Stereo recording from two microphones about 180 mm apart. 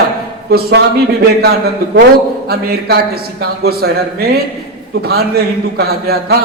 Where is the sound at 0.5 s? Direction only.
65° right (ahead or behind).